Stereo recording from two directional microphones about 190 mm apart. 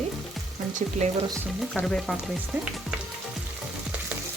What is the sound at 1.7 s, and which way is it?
Frying, 5° left (ahead or behind).